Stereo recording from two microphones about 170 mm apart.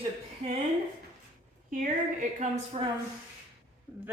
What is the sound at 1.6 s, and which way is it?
Speech, 50° right (ahead or behind).